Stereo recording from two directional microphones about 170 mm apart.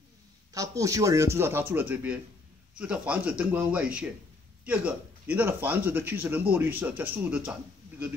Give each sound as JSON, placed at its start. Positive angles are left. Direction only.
{"t": 0.5, "sound": "a man's voice", "side_deg": -20}